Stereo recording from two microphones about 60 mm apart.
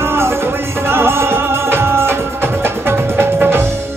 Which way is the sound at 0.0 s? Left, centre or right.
Right.